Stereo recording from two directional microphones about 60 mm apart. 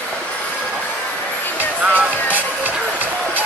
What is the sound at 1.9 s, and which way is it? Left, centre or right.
Music, right.